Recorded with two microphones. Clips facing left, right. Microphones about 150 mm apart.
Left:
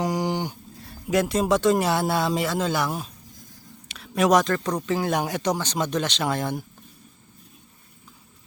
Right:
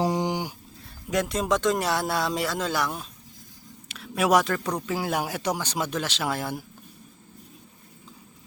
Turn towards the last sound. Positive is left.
turn(degrees=-5)  # may be behind; listen again after turning